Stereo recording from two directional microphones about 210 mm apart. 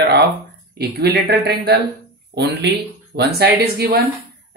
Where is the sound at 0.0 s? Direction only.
50° right (ahead or behind).